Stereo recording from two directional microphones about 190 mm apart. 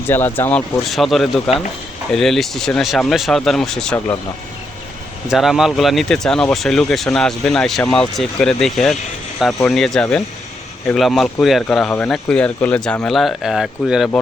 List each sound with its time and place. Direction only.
0.1 s speech: 10° left (ahead or behind)
0.9 s speech: centre (ahead or behind)
5.3 s speech: centre (ahead or behind)